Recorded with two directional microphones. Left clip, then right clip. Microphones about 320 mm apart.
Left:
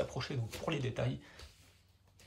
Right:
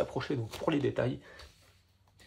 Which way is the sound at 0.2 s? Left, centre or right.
Right.